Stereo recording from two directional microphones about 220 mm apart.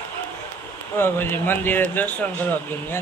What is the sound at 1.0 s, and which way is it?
Speech, 10° left (ahead or behind).